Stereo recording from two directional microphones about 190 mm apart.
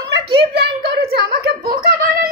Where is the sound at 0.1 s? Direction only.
60° right (ahead or behind).